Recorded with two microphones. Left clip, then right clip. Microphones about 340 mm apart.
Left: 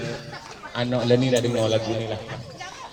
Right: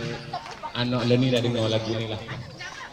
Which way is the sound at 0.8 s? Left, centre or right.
Left.